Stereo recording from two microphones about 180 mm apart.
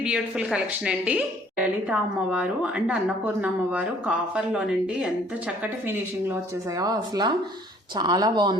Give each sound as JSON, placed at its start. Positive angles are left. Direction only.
{"t": 0.0, "sound": "a woman's voice", "side_deg": -5}